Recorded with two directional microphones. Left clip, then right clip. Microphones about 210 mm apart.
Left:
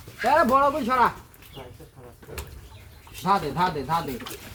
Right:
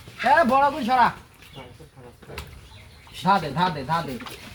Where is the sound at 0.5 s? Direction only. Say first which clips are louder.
Right 1 dB; 40° right (ahead or behind).